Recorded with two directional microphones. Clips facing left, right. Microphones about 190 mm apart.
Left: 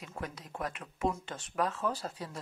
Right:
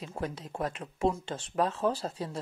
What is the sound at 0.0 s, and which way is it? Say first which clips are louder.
Speech: right 5 dB; 30° right (ahead or behind).